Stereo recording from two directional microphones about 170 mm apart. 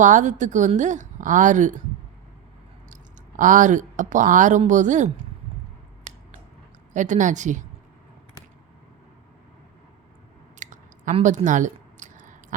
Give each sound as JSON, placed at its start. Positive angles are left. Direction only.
{"t": 0.0, "sound": "speech", "side_deg": -45}
{"t": 2.9, "sound": "speech", "side_deg": -50}
{"t": 6.9, "sound": "speech", "side_deg": -45}
{"t": 10.6, "sound": "a sound", "side_deg": -45}